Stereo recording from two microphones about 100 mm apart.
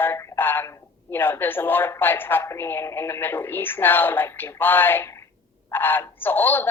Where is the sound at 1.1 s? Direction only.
20° left (ahead or behind).